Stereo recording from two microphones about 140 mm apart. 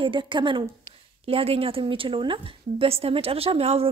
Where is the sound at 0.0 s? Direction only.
35° right (ahead or behind).